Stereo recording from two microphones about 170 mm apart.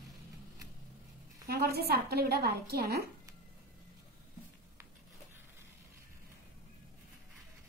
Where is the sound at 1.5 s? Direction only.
65° right (ahead or behind).